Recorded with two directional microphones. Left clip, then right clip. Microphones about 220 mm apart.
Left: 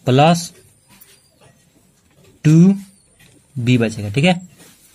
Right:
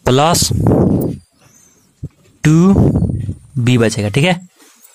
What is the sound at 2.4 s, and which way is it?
Speech, 35° right (ahead or behind).